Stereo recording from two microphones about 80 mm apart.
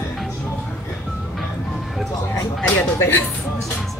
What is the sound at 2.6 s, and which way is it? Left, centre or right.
Speech, left.